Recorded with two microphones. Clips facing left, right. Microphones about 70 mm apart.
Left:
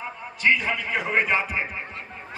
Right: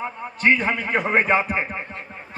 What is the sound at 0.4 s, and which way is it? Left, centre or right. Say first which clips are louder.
Speech: right 3 dB; right.